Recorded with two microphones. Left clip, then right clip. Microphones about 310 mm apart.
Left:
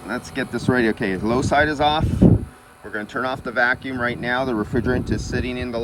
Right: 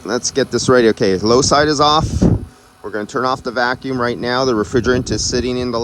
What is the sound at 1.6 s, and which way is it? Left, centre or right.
Speech, centre.